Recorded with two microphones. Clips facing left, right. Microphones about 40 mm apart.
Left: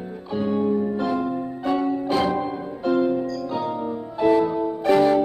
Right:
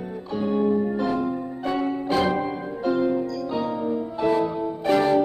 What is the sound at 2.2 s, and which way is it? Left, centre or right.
Music, right.